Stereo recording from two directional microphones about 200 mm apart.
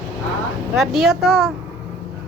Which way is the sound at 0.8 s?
Centre (ahead or behind).